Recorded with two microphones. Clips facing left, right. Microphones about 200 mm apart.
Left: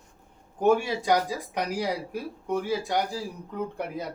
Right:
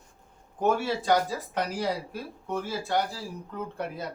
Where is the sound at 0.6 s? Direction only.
15° left (ahead or behind).